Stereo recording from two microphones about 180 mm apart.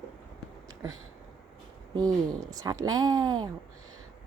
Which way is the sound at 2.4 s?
20° right (ahead or behind).